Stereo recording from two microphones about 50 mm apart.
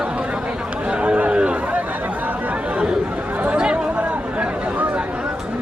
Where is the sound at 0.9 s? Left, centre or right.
Right.